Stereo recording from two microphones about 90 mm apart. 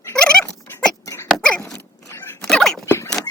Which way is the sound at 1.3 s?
10° left (ahead or behind).